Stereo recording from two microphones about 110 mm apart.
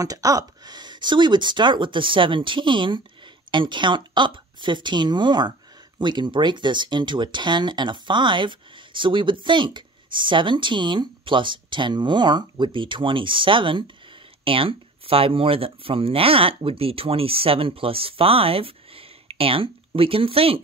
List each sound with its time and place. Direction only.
0.0 s speech: 30° right (ahead or behind); by 20.6 s 60° right (ahead or behind)